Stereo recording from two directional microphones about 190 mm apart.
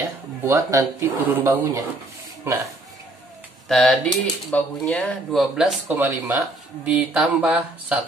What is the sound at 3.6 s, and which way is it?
Speech, centre (ahead or behind).